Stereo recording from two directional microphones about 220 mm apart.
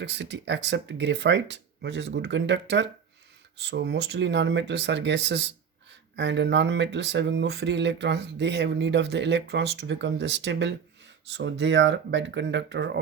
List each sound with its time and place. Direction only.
0.0 s speech: 50° right (ahead or behind)